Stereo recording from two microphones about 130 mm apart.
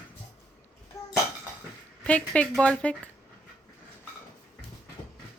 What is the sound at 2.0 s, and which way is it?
Speech, 10° left (ahead or behind).